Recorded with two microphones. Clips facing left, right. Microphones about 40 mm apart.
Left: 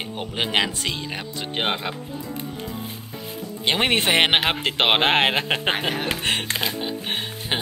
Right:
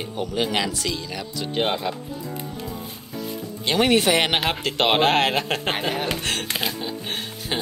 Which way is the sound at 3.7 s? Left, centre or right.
Left.